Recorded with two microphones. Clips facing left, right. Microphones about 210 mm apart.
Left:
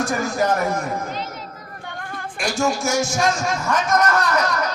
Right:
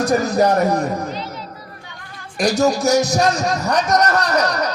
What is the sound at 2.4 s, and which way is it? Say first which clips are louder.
A man's voice: right 6 dB; 40° right (ahead or behind).